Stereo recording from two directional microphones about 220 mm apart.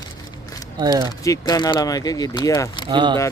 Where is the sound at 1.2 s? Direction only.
15° left (ahead or behind).